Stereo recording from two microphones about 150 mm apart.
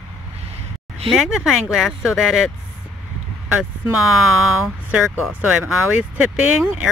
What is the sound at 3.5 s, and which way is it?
Speech, 5° right (ahead or behind).